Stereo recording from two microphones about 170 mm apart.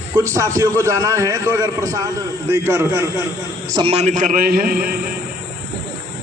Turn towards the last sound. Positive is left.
turn(degrees=-65)  # may be behind; listen again after turning